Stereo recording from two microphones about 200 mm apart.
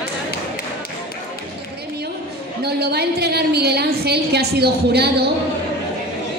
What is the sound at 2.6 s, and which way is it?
A woman's voice, 55° right (ahead or behind).